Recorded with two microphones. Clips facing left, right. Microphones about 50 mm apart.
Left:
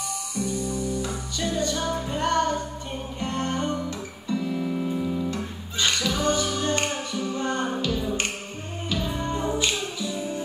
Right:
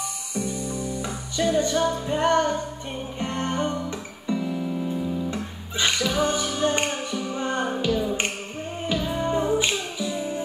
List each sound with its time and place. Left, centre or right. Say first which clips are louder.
0.5 s music: left 2 dB; right
4.6 s music: left 1 dB; centre
5.3 s music: even; centre